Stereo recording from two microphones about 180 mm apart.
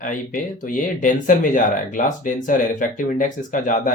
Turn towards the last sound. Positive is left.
turn(degrees=45)  # may be behind; listen again after turning